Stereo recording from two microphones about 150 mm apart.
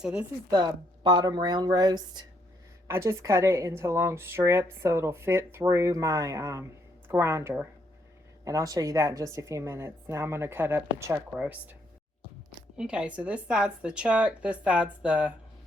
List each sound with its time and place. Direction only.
0.0 s a woman's voice: 5° right (ahead or behind)
0.5 s a woman's voice: 30° right (ahead or behind)
8.4 s a woman's voice: 25° right (ahead or behind)
12.7 s a woman's voice: 5° right (ahead or behind)